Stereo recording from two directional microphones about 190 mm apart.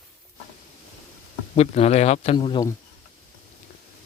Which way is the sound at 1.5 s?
35° left (ahead or behind).